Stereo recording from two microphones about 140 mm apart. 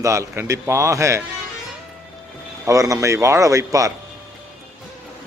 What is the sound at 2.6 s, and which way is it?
A man's voice, 25° right (ahead or behind).